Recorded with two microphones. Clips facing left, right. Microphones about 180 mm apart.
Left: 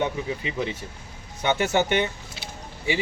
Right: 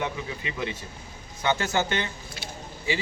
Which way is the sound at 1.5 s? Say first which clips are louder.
Left 3 dB; 20° left (ahead or behind).